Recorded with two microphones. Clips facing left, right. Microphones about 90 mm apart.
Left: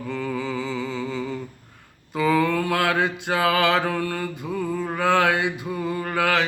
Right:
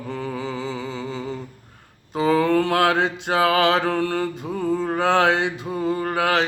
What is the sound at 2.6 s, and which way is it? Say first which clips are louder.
Mantra: right 3 dB; 30° right (ahead or behind).